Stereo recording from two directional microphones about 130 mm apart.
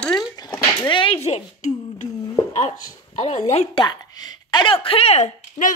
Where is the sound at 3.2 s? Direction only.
60° left (ahead or behind).